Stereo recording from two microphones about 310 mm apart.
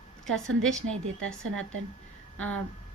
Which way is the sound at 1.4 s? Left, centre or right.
Right.